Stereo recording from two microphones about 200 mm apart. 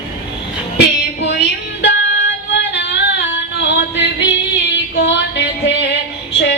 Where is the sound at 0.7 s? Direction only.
60° left (ahead or behind).